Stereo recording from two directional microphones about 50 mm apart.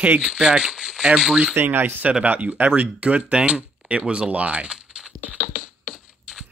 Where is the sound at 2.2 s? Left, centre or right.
Right.